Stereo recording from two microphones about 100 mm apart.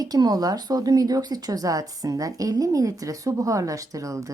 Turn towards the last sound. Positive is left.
turn(degrees=-35)  # may be behind; listen again after turning